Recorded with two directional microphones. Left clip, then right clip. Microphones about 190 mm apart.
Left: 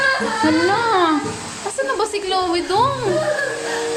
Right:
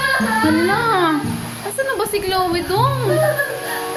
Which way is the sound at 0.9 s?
Centre (ahead or behind).